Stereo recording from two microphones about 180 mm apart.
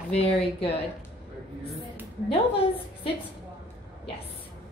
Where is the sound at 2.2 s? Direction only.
30° left (ahead or behind).